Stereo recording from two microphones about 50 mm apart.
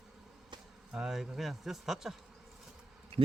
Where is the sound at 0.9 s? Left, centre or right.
Centre.